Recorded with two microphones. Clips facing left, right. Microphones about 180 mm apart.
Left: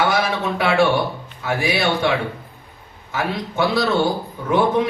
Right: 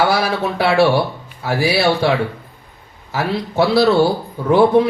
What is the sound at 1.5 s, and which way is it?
Speech, 35° right (ahead or behind).